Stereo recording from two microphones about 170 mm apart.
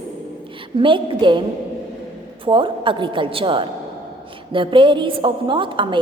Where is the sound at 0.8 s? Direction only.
30° right (ahead or behind).